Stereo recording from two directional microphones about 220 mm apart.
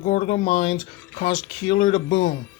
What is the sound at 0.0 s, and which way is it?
Speech, 35° left (ahead or behind).